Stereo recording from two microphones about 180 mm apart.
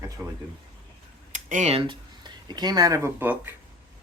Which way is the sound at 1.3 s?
45° right (ahead or behind).